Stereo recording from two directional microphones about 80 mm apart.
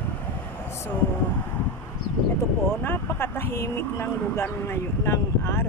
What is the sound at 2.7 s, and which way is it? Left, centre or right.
Speech, left.